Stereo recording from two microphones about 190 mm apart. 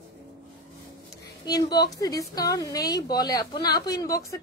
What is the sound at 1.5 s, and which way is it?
A woman's voice, 20° left (ahead or behind).